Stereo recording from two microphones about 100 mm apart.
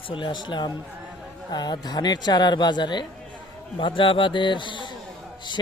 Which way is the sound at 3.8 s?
60° left (ahead or behind).